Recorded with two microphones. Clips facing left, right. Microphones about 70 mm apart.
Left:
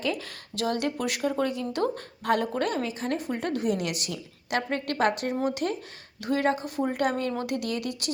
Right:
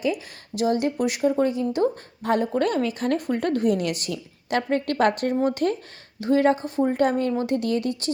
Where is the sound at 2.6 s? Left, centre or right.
Right.